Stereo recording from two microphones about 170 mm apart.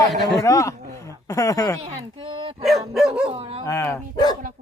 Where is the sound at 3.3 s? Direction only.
35° right (ahead or behind).